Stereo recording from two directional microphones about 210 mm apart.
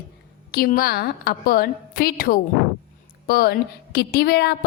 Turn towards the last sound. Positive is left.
turn(degrees=50)  # may be behind; listen again after turning